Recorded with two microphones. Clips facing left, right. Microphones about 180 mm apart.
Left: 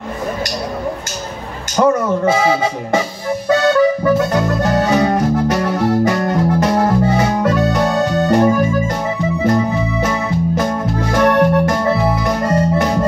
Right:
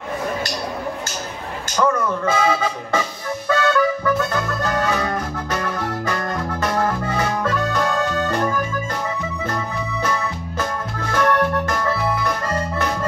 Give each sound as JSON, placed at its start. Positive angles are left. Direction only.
{"t": 1.8, "sound": "speech", "side_deg": 35}
{"t": 3.4, "sound": "music", "side_deg": 30}
{"t": 8.0, "sound": "organ", "side_deg": 35}
{"t": 8.3, "sound": "organ", "side_deg": 20}
{"t": 9.4, "sound": "music", "side_deg": 20}